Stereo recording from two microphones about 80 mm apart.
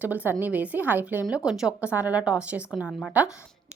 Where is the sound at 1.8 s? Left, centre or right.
Centre.